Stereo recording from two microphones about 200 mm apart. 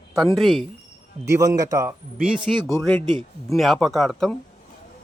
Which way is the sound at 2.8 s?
5° left (ahead or behind).